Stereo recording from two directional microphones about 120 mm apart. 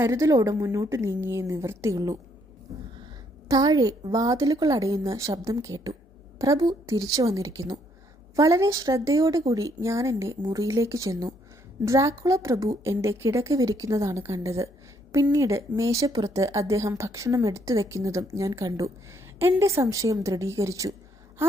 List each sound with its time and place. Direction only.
0.0 s a woman's voice: 25° right (ahead or behind)
3.5 s a woman's voice: 30° right (ahead or behind)